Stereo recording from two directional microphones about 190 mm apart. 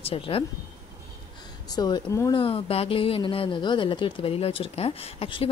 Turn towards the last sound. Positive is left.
turn(degrees=30)  # may be behind; listen again after turning